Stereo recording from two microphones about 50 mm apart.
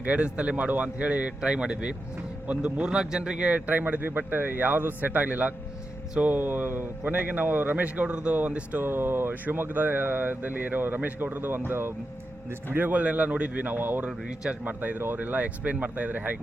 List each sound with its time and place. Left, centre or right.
0.0 s speech: right
8.8 s speech: right
11.7 s speech: right
12.7 s speech: right